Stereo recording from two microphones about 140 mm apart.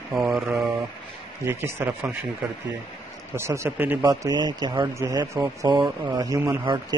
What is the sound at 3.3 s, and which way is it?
Speech, 20° right (ahead or behind).